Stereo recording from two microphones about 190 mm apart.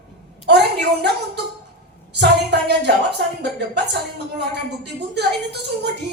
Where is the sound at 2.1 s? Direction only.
60° right (ahead or behind).